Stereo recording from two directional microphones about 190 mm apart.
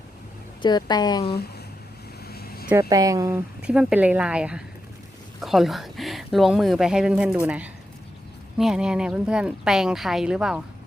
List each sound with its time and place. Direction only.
0.6 s a woman's voice: 20° left (ahead or behind)
2.2 s vehicle: 55° left (ahead or behind)
2.9 s speech: 20° right (ahead or behind)
3.6 s speech: 5° right (ahead or behind)